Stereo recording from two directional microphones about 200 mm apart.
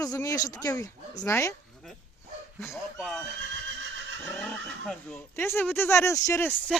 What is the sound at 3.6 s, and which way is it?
Neigh, 70° right (ahead or behind).